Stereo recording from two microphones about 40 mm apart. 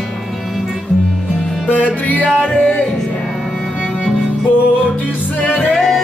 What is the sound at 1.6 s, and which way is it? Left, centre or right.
Music, left.